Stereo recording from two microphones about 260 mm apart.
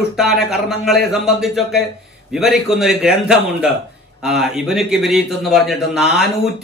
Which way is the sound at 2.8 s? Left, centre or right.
Centre.